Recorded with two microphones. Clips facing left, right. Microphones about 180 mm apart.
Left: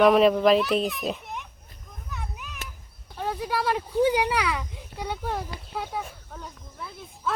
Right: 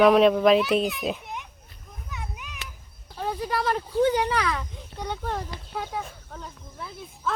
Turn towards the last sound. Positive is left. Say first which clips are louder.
# even
turn(degrees=0)  # may be behind; listen again after turning